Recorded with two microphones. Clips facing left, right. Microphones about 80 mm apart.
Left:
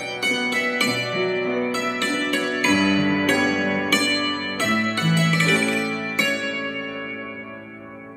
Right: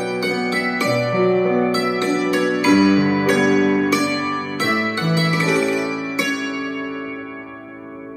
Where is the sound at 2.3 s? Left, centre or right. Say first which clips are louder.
Right 6 dB; centre.